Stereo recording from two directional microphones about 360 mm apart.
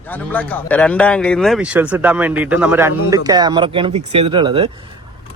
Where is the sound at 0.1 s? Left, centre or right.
Centre.